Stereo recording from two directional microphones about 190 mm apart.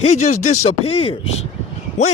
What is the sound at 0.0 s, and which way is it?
Speech, 35° left (ahead or behind).